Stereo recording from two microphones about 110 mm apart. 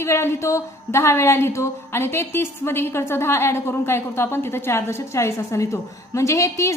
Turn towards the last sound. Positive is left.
turn(degrees=25)  # may be behind; listen again after turning